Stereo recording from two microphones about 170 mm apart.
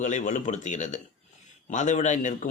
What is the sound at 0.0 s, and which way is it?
A man's voice, 45° left (ahead or behind).